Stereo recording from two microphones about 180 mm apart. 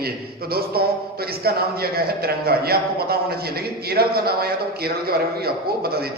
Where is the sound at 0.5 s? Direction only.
60° right (ahead or behind).